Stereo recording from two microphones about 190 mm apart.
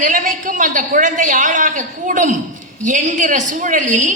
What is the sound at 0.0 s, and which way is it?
A man's voice, 45° right (ahead or behind).